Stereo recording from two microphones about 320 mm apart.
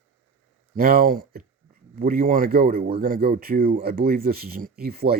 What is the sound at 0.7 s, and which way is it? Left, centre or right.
Speech, right.